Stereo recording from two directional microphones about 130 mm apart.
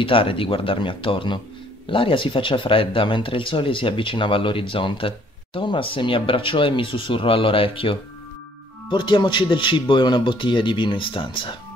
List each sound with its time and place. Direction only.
0.0 s speech: 45° left (ahead or behind)